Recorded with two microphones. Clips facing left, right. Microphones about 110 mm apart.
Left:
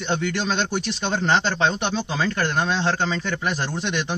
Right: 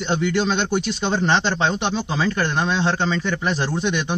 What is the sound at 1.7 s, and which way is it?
Speech, 10° right (ahead or behind).